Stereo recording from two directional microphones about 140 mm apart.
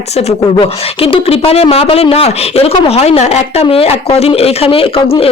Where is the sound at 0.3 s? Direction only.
40° left (ahead or behind).